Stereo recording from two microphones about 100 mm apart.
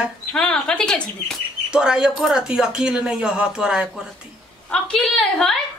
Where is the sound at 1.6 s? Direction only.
10° right (ahead or behind).